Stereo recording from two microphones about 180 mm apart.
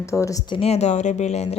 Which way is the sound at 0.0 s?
15° left (ahead or behind).